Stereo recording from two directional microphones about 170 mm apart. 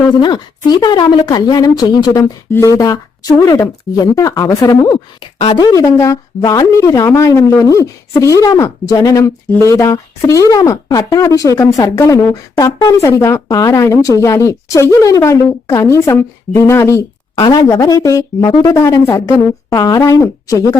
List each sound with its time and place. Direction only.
0.2 s a woman's voice: 25° left (ahead or behind)
5.2 s a woman's voice: 30° left (ahead or behind)